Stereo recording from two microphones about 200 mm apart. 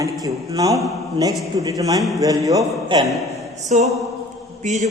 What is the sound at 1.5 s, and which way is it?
Speech, 15° right (ahead or behind).